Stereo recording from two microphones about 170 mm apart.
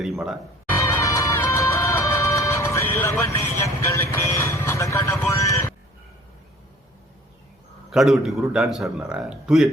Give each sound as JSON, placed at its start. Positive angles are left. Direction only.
{"t": 0.0, "sound": "speech", "side_deg": 0}
{"t": 0.8, "sound": "music", "side_deg": 20}
{"t": 7.9, "sound": "speech", "side_deg": 0}